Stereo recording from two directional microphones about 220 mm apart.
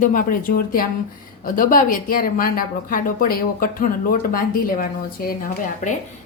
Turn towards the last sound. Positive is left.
turn(degrees=40)  # may be behind; listen again after turning